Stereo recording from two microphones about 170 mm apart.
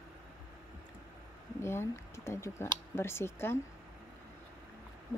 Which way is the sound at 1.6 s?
15° left (ahead or behind).